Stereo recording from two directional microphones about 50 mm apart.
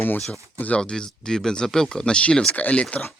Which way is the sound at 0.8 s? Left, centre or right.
Centre.